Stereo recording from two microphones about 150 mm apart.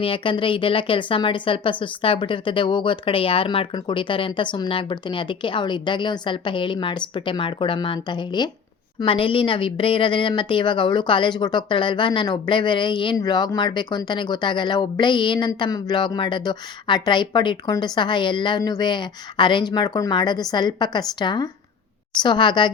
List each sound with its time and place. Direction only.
0.0 s a woman's voice: 35° left (ahead or behind)